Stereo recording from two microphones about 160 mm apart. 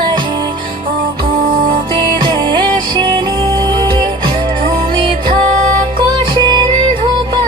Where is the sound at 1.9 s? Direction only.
30° right (ahead or behind).